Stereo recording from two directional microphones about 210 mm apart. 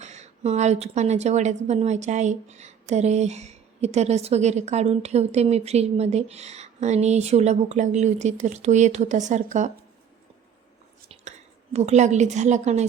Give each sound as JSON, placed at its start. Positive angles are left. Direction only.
{"t": 0.0, "sound": "a woman's voice", "side_deg": -35}
{"t": 11.1, "sound": "a woman's voice", "side_deg": -30}